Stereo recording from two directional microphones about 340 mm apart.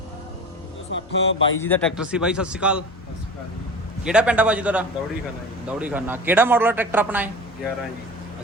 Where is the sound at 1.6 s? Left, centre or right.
Centre.